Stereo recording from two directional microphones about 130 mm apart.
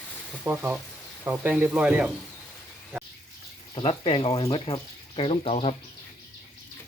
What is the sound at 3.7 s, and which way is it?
Speech, 45° left (ahead or behind).